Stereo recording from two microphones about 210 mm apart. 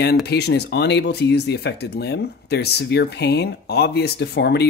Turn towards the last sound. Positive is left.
turn(degrees=55)  # may be behind; listen again after turning